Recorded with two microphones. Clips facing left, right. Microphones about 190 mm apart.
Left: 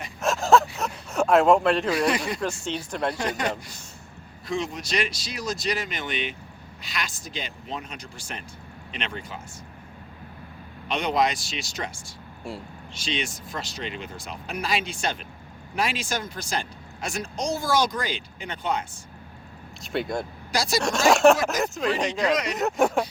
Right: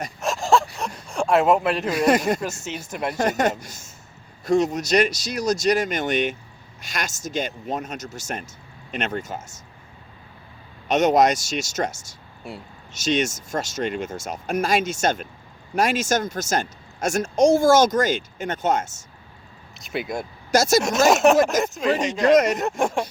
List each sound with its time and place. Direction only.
0.2 s a sound: centre (ahead or behind)
1.9 s speech: 45° right (ahead or behind)
2.4 s speech: 5° right (ahead or behind)
3.2 s speech: 45° right (ahead or behind)
10.8 s speech: 45° right (ahead or behind)
19.9 s speech: 5° right (ahead or behind)
20.5 s speech: 45° right (ahead or behind)
21.1 s speech: centre (ahead or behind)
22.3 s speech: 45° right (ahead or behind)
22.5 s speech: centre (ahead or behind)